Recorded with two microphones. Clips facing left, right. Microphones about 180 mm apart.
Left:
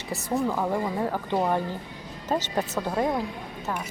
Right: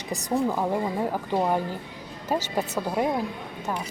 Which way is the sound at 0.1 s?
15° right (ahead or behind).